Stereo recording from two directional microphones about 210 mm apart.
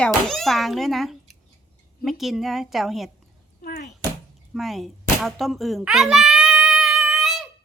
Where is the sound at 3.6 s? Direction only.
50° left (ahead or behind).